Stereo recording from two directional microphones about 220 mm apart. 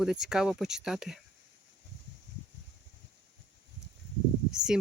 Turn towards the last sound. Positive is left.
turn(degrees=-5)  # may be behind; listen again after turning